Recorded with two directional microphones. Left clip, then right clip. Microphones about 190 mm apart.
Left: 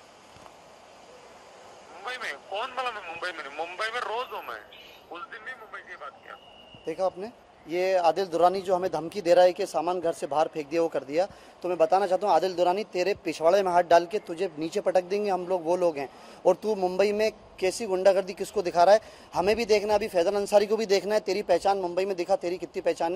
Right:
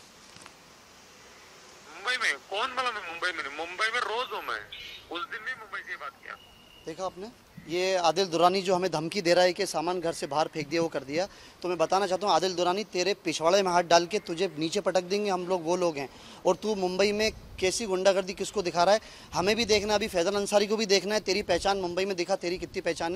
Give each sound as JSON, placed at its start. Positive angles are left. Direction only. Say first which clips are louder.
{"t": 2.0, "sound": "a man's voice", "louder": "right 6 dB", "side_deg": -25}
{"t": 7.2, "sound": "speech", "louder": "left 4 dB", "side_deg": -15}
{"t": 7.8, "sound": "speech", "louder": "left 2 dB", "side_deg": -35}